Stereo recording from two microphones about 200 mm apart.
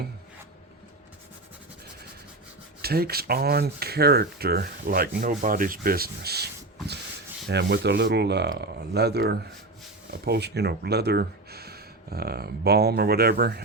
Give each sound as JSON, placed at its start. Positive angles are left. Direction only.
{"t": 2.8, "sound": "speech", "side_deg": -50}